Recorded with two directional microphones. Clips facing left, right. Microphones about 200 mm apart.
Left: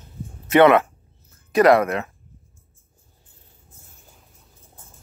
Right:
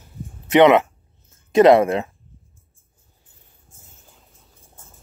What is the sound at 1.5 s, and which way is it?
Speech, 25° right (ahead or behind).